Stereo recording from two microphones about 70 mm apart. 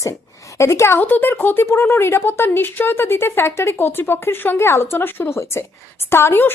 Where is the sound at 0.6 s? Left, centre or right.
Left.